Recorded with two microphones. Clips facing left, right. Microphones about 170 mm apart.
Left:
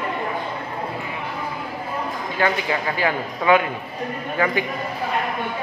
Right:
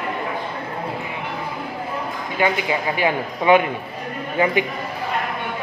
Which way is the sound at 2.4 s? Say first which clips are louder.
Right 1 dB; 20° right (ahead or behind).